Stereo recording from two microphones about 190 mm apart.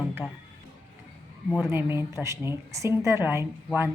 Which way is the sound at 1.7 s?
10° right (ahead or behind).